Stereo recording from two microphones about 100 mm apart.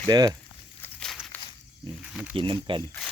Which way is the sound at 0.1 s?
45° right (ahead or behind).